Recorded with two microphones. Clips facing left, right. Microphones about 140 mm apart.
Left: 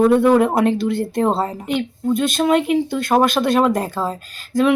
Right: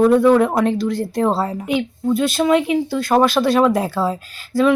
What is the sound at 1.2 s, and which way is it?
Speech, 20° left (ahead or behind).